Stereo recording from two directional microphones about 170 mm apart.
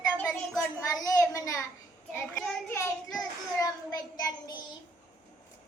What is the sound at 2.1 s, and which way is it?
Child singing, 10° left (ahead or behind).